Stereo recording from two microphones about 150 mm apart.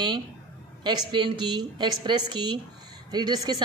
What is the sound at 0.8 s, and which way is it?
A woman's voice, 30° right (ahead or behind).